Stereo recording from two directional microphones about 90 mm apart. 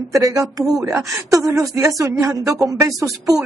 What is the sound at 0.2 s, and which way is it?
Speech, 40° right (ahead or behind).